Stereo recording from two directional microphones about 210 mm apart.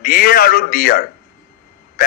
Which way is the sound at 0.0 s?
45° left (ahead or behind).